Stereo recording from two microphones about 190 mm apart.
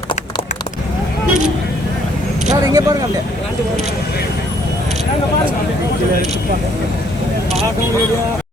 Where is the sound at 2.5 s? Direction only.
20° right (ahead or behind).